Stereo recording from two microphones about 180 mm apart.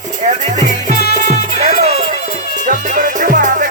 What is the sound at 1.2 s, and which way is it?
Music, 40° right (ahead or behind).